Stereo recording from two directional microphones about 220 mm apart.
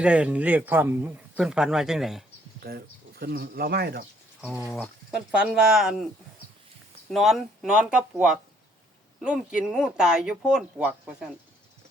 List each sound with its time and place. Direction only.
0.0 s a man's voice: 5° right (ahead or behind)
2.6 s speech: 45° right (ahead or behind)
4.4 s a man's voice: 5° right (ahead or behind)
7.1 s a man's voice: centre (ahead or behind)